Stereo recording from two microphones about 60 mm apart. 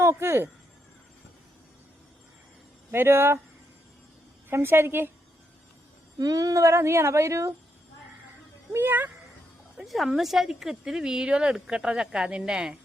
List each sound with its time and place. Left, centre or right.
0.0 s speech: right
2.9 s a woman's voice: right
4.4 s a woman's voice: right
6.1 s speech: right
6.6 s a woman's voice: right
8.7 s a woman's voice: right
9.8 s speech: centre